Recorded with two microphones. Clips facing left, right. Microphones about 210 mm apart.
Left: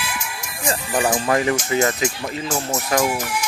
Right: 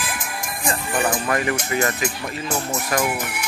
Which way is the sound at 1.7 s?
25° left (ahead or behind).